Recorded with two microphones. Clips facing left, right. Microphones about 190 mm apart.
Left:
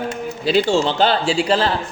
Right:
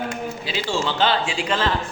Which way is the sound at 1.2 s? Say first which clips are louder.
Left 6 dB; 35° left (ahead or behind).